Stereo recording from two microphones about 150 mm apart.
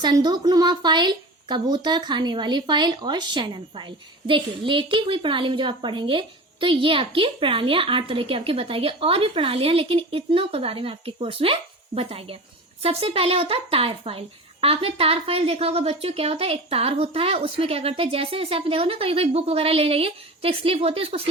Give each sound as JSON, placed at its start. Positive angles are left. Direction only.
{"t": 0.0, "sound": "speech", "side_deg": -30}